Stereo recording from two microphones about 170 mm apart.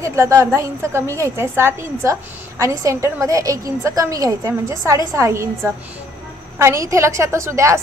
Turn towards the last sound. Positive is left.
turn(degrees=-15)  # may be behind; listen again after turning